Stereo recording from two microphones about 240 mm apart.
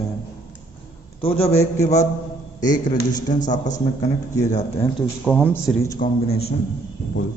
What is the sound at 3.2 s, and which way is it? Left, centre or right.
Speech, left.